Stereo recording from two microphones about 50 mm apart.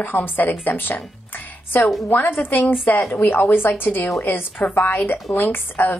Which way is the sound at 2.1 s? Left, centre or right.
Left.